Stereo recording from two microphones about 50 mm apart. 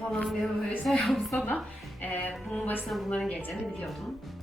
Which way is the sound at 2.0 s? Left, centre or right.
Left.